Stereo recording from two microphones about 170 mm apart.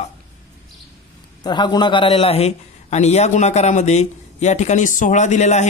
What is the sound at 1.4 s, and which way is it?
A man's voice, 25° left (ahead or behind).